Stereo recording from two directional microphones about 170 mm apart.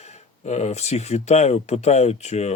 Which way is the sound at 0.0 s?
40° left (ahead or behind).